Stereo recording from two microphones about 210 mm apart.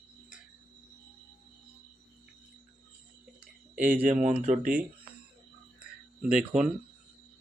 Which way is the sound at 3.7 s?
10° right (ahead or behind).